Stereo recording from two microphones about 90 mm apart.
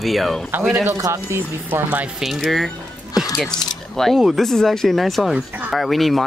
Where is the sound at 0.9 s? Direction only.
35° right (ahead or behind).